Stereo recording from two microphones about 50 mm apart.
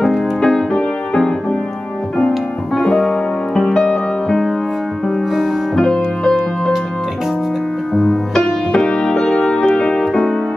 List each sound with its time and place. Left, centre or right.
0.4 s music: centre
5.8 s music: centre
7.9 s music: centre